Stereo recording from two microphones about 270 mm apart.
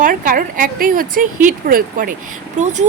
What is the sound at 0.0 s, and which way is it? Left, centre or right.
A woman's voice, right.